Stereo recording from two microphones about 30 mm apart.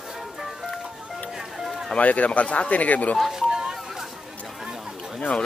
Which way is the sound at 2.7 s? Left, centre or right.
Left.